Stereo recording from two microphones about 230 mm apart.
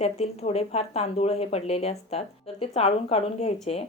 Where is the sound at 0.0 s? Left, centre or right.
Left.